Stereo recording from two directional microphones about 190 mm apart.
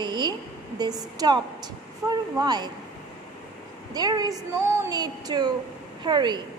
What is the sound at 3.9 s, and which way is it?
A woman's voice, 20° right (ahead or behind).